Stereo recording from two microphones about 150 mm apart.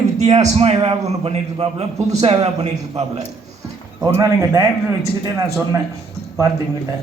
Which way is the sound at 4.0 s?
20° right (ahead or behind).